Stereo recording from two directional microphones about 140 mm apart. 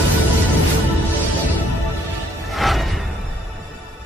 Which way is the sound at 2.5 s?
Centre (ahead or behind).